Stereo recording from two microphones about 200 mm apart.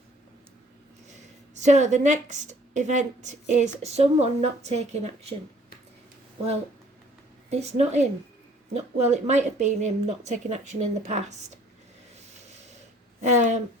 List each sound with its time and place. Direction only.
1.5 s a woman's voice: 35° right (ahead or behind)
7.5 s a woman's voice: 35° right (ahead or behind)
13.2 s a woman's voice: 40° right (ahead or behind)